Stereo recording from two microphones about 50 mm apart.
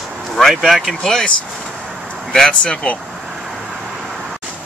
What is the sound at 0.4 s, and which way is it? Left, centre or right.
Speech, centre.